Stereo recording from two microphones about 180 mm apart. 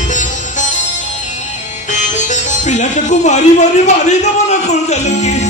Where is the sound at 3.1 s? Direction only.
40° left (ahead or behind).